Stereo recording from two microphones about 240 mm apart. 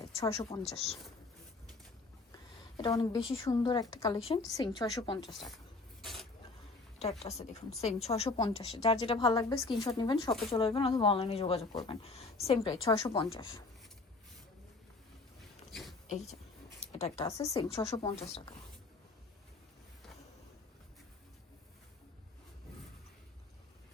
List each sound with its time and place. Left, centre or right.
0.0 s speech: centre
2.7 s a woman's voice: centre
5.3 s speech: centre
6.0 s a sound: centre
7.0 s a woman's voice: left
15.7 s a sound: centre
16.0 s a woman's voice: left
17.2 s a woman's voice: centre